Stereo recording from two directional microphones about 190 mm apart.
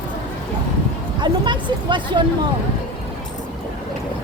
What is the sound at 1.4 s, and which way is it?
Speech, 25° right (ahead or behind).